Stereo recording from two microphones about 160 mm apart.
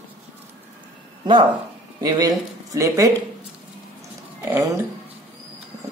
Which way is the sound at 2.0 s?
20° right (ahead or behind).